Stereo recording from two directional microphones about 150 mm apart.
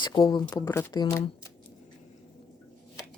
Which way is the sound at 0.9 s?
30° left (ahead or behind).